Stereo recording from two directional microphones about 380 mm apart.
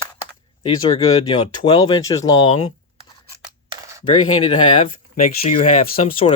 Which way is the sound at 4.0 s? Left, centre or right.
Centre.